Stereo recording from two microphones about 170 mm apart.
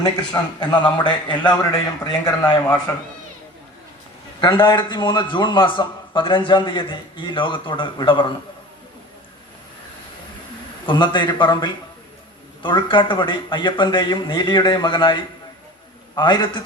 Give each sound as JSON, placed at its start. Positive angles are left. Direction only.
{"t": 0.0, "sound": "a man's voice", "side_deg": 25}
{"t": 4.4, "sound": "a man's voice", "side_deg": 25}
{"t": 10.8, "sound": "a man's voice", "side_deg": 25}